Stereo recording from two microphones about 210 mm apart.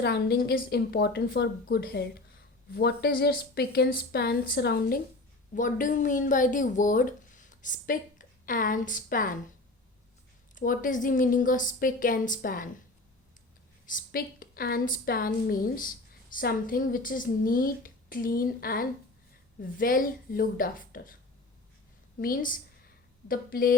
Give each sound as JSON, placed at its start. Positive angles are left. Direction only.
{"t": 0.0, "sound": "a woman's voice", "side_deg": 50}
{"t": 5.5, "sound": "a woman's voice", "side_deg": 40}
{"t": 10.5, "sound": "a woman's voice", "side_deg": 40}
{"t": 13.8, "sound": "a woman's voice", "side_deg": 40}
{"t": 22.2, "sound": "a woman's voice", "side_deg": 40}